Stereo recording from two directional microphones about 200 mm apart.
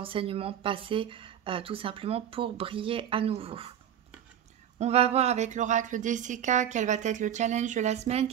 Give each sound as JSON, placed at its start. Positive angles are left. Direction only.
{"t": 0.0, "sound": "a woman's voice", "side_deg": -25}
{"t": 4.7, "sound": "a woman's voice", "side_deg": -30}